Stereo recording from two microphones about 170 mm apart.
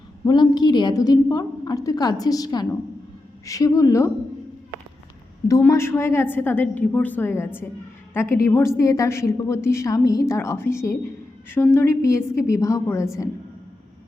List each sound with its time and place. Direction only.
0.3 s a woman's voice: 25° left (ahead or behind)
5.5 s a woman's voice: 15° left (ahead or behind)